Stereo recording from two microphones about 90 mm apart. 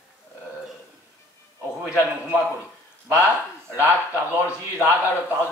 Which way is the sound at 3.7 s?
25° right (ahead or behind).